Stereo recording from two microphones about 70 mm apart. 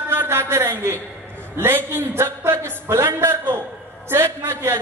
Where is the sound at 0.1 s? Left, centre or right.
Right.